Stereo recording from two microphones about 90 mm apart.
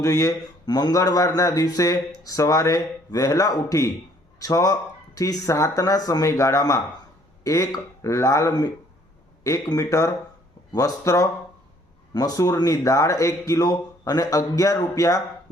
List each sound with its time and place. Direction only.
0.0 s speech: 40° left (ahead or behind)